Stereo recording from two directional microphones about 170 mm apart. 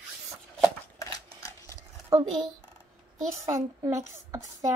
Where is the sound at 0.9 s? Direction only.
20° left (ahead or behind).